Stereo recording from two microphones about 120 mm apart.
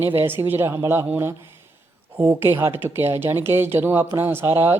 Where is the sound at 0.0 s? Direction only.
20° right (ahead or behind).